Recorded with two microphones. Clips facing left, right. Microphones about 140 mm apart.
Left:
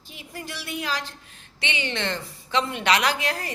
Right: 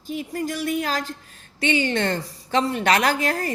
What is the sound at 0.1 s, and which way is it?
A woman's voice, 45° right (ahead or behind).